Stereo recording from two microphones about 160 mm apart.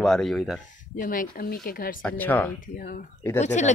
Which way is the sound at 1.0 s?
60° left (ahead or behind).